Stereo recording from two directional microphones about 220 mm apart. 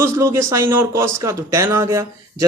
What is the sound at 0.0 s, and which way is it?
Speech, 10° right (ahead or behind).